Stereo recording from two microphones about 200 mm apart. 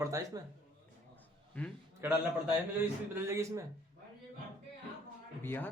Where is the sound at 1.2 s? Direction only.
5° left (ahead or behind).